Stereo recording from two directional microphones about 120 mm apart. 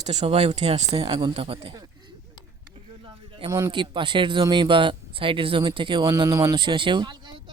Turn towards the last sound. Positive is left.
turn(degrees=-40)  # may be behind; listen again after turning